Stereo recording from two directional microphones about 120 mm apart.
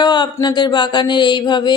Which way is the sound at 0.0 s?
40° left (ahead or behind).